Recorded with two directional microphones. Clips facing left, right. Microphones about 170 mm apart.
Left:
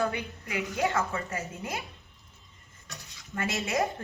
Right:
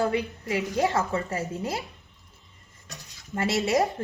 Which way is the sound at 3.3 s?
35° right (ahead or behind).